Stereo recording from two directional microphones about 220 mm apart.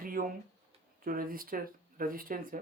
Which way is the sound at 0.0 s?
40° right (ahead or behind).